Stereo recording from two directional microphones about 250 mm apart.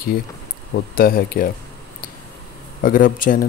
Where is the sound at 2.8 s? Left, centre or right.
Left.